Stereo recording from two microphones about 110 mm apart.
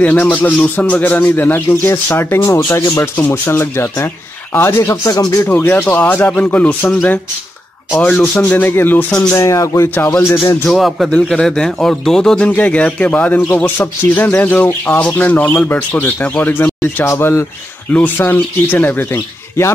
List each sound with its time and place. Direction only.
0.0 s speech: 15° left (ahead or behind); by 5.5 s 35° left (ahead or behind)
5.5 s speech: 20° left (ahead or behind)
8.0 s speech: 15° left (ahead or behind)
9.3 s speech: 30° left (ahead or behind)
10.6 s speech: centre (ahead or behind); by 19.7 s 20° left (ahead or behind)